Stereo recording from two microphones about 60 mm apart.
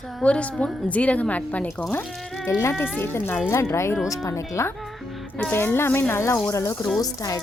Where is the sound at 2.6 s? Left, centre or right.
Left.